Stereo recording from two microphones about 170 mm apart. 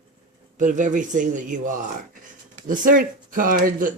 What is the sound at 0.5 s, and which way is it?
A man's voice, 50° right (ahead or behind).